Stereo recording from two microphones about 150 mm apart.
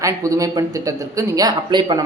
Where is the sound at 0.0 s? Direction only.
20° right (ahead or behind).